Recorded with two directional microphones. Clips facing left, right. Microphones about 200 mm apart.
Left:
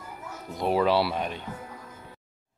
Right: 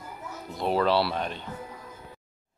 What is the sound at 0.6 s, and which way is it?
Speech, 10° left (ahead or behind).